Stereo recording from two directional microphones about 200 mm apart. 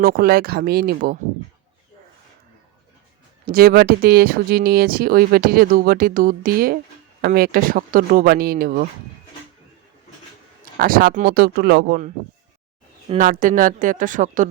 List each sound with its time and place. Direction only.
0.0 s speech: 50° right (ahead or behind)
3.4 s speech: 45° right (ahead or behind)
10.8 s speech: 45° right (ahead or behind)
13.1 s speech: 40° right (ahead or behind)